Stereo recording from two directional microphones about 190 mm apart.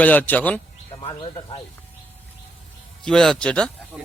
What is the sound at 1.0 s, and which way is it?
Speech, 25° left (ahead or behind).